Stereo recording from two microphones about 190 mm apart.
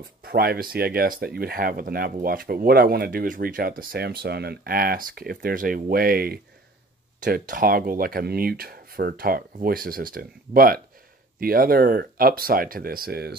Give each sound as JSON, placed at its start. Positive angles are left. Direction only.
{"t": 0.2, "sound": "speech", "side_deg": -55}